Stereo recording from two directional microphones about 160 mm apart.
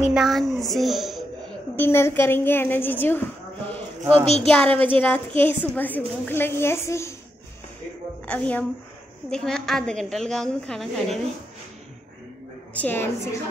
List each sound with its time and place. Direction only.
0.0 s a woman's voice: centre (ahead or behind)
1.8 s a woman's voice: 15° left (ahead or behind)
8.3 s a woman's voice: 10° left (ahead or behind)
12.7 s a woman's voice: 15° left (ahead or behind)